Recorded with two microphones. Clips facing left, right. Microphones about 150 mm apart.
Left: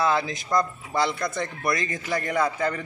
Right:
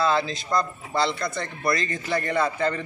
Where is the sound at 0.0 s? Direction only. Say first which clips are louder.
Right 1 dB; 15° left (ahead or behind).